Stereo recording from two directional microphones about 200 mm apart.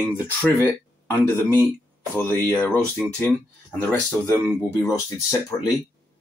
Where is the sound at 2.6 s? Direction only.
5° left (ahead or behind).